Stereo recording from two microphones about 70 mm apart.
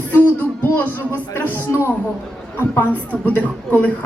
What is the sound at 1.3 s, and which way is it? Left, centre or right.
Speech, left.